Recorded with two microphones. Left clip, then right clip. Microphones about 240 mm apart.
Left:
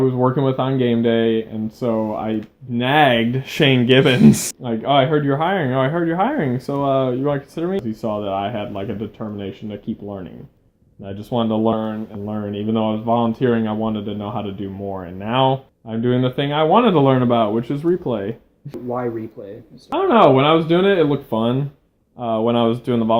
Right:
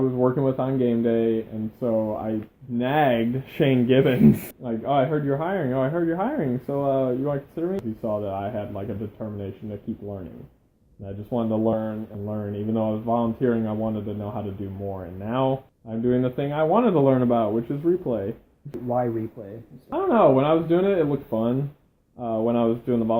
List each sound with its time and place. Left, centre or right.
0.2 s speech: left
11.0 s speech: left
19.9 s speech: left